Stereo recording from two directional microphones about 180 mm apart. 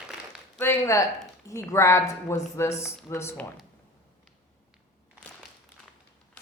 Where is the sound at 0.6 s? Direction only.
15° left (ahead or behind).